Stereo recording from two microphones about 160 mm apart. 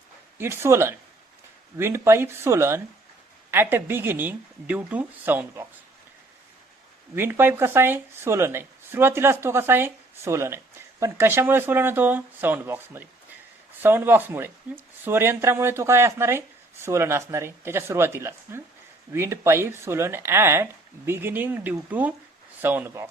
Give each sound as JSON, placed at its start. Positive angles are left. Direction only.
{"t": 0.3, "sound": "speech", "side_deg": -15}
{"t": 7.2, "sound": "speech", "side_deg": -15}